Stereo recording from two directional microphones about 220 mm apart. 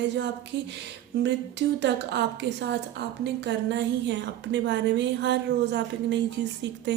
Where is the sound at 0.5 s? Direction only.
50° right (ahead or behind).